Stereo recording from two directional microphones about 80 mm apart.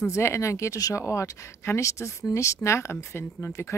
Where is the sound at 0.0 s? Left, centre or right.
Left.